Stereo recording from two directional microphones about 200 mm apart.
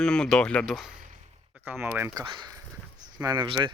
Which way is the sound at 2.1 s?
20° right (ahead or behind).